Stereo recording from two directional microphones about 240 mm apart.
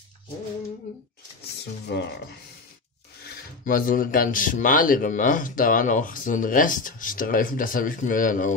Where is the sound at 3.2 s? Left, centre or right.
Left.